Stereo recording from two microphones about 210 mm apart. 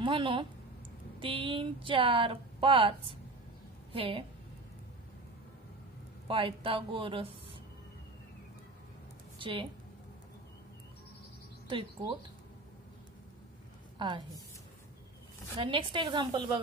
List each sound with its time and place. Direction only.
0.0 s a woman's voice: 25° right (ahead or behind)
6.2 s speech: 25° right (ahead or behind)
9.4 s speech: 25° right (ahead or behind)
13.9 s a woman's voice: 20° right (ahead or behind)
15.5 s speech: 25° right (ahead or behind)